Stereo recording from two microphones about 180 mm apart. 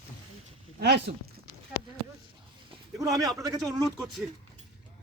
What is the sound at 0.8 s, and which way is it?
Speech, 65° right (ahead or behind).